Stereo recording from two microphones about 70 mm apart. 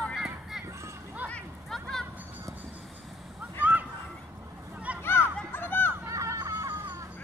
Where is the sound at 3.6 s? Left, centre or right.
Right.